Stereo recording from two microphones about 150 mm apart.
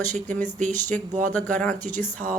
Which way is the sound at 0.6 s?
55° right (ahead or behind).